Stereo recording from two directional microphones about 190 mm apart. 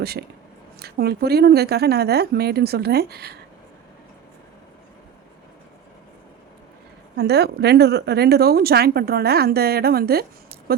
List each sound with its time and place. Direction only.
0.0 s a woman's voice: 55° right (ahead or behind)
7.2 s a woman's voice: 60° right (ahead or behind)